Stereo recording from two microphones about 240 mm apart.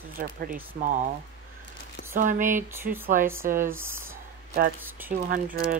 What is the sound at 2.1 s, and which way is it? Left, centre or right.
Speech, right.